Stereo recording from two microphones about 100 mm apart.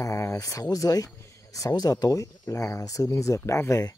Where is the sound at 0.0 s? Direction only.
30° left (ahead or behind).